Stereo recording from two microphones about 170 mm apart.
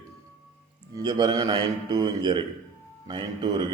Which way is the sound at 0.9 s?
25° right (ahead or behind).